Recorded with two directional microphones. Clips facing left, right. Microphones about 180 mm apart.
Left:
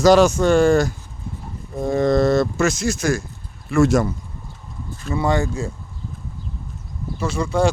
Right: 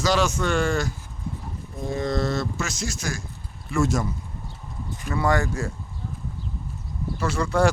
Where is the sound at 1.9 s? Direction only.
55° left (ahead or behind).